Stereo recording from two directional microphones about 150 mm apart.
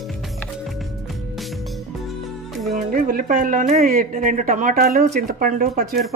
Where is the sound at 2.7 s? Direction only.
60° right (ahead or behind).